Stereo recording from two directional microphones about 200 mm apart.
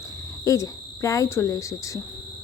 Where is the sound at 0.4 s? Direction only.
15° left (ahead or behind).